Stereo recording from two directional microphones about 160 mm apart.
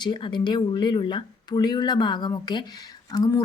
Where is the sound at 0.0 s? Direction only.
30° left (ahead or behind).